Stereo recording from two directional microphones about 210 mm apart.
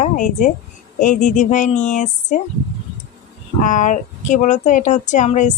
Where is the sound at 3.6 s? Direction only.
35° left (ahead or behind).